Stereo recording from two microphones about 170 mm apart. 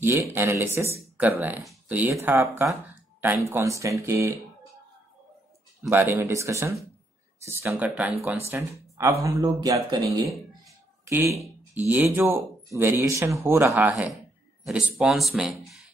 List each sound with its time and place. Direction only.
0.0 s speech: 15° right (ahead or behind)
5.8 s speech: 15° right (ahead or behind)
14.7 s speech: 5° right (ahead or behind)